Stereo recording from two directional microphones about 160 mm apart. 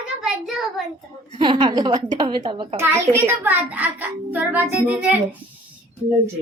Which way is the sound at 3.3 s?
10° right (ahead or behind).